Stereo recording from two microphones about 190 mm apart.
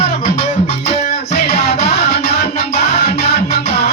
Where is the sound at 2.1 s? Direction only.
55° left (ahead or behind).